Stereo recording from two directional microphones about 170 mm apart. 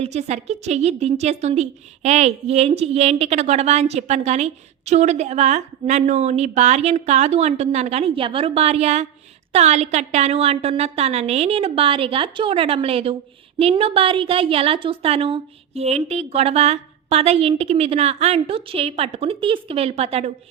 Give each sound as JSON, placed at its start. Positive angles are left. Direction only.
{"t": 0.0, "sound": "a woman's voice", "side_deg": -40}